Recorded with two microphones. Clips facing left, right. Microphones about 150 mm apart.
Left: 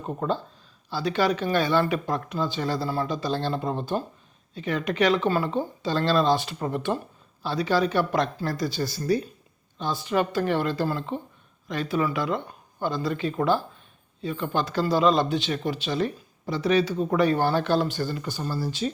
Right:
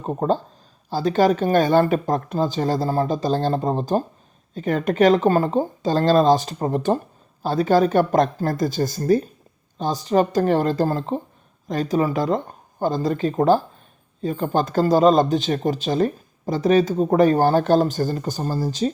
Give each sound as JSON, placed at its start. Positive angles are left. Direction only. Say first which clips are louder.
{"t": 0.0, "sound": "speech", "louder": "right 6 dB", "side_deg": -35}